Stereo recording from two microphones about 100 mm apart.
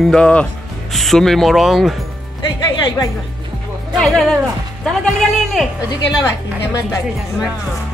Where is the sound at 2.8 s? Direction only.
40° left (ahead or behind).